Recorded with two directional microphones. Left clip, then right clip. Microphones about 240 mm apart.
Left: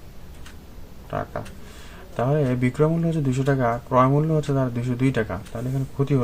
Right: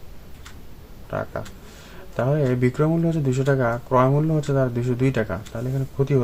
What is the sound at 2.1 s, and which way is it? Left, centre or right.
Speech, centre.